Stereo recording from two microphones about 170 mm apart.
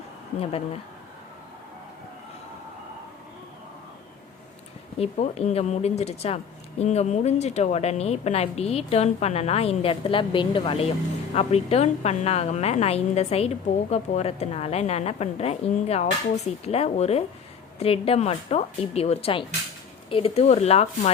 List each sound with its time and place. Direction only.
0.3 s speech: 35° left (ahead or behind)
4.9 s speech: 40° left (ahead or behind)